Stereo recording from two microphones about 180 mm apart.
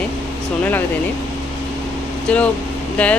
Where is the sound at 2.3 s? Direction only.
5° left (ahead or behind).